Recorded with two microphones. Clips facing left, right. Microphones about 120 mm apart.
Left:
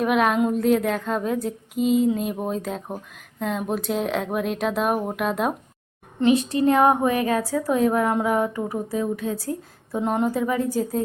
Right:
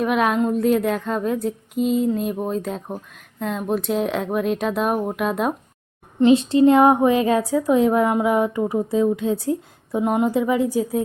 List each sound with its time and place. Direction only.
0.0 s a woman's voice: centre (ahead or behind)
6.1 s a woman's voice: 25° right (ahead or behind)